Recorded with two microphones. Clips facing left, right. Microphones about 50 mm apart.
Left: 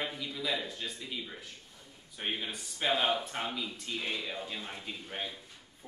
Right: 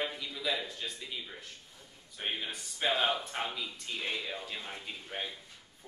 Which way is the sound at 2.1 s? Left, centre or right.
Centre.